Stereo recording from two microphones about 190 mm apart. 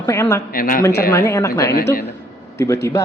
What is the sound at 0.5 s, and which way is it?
Speech, 45° left (ahead or behind).